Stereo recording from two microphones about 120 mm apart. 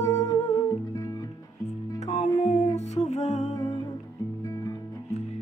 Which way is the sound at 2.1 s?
70° left (ahead or behind).